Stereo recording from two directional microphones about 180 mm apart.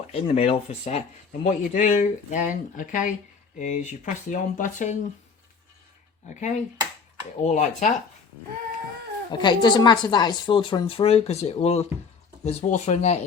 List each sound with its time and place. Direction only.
0.1 s speech: 35° left (ahead or behind)
6.2 s speech: 40° left (ahead or behind)
9.3 s a woman's voice: 25° left (ahead or behind)